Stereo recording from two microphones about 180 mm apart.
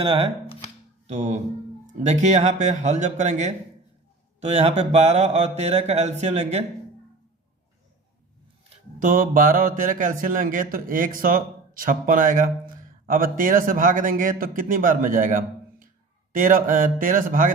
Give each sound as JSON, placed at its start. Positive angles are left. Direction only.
{"t": 0.0, "sound": "speech", "side_deg": -30}
{"t": 1.0, "sound": "speech", "side_deg": -40}
{"t": 1.9, "sound": "mantra", "side_deg": -40}
{"t": 9.0, "sound": "speech", "side_deg": -50}